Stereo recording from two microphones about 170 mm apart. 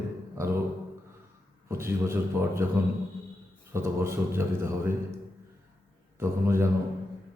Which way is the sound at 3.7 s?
15° right (ahead or behind).